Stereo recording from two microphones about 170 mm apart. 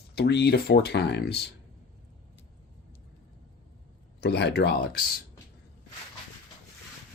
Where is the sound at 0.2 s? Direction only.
75° left (ahead or behind).